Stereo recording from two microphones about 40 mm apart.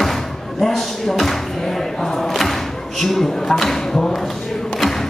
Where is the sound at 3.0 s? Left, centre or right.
Centre.